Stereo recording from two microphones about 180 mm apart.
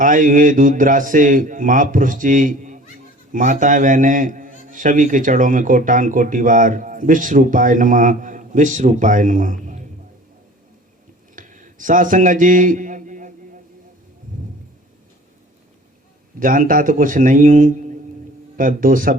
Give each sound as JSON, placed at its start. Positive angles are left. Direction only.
{"t": 0.0, "sound": "a man's voice", "side_deg": -45}
{"t": 11.3, "sound": "a sound", "side_deg": -45}
{"t": 16.4, "sound": "a man's voice", "side_deg": -50}